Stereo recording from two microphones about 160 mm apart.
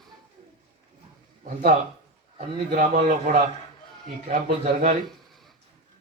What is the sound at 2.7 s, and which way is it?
A man's voice, 60° right (ahead or behind).